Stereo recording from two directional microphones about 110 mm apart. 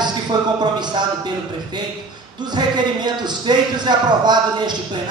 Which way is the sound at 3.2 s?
40° right (ahead or behind).